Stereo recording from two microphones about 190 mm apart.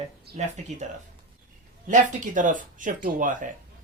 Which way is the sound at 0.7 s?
40° right (ahead or behind).